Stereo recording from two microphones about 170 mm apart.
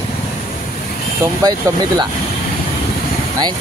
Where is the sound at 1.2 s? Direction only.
20° right (ahead or behind).